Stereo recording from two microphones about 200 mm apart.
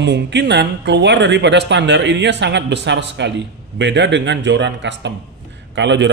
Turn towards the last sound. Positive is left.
turn(degrees=-60)  # may be behind; listen again after turning